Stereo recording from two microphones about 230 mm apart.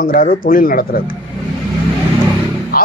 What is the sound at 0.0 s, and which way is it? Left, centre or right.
A man's voice, left.